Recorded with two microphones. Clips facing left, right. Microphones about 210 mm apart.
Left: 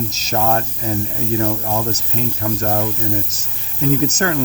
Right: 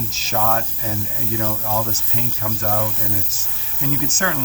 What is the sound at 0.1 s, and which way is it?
Speech, 40° left (ahead or behind).